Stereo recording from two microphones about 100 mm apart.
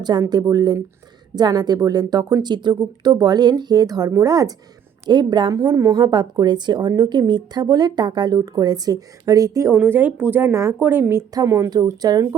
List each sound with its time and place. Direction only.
0.0 s a woman's voice: 45° right (ahead or behind)
5.0 s speech: 50° right (ahead or behind)
5.5 s speech: 40° right (ahead or behind)
9.7 s speech: 20° right (ahead or behind)
11.3 s a woman's voice: 35° right (ahead or behind)